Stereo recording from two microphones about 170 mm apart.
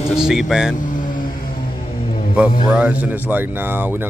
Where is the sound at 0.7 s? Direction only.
50° left (ahead or behind).